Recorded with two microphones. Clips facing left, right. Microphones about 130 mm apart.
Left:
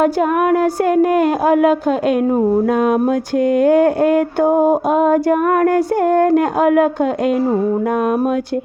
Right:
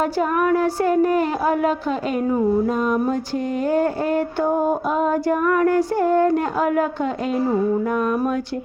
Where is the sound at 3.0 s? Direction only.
75° left (ahead or behind); by 4.6 s 50° left (ahead or behind).